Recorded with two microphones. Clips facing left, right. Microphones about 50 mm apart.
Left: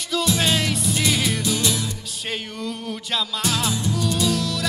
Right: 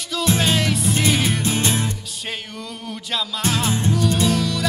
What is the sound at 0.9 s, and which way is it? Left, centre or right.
Music, right.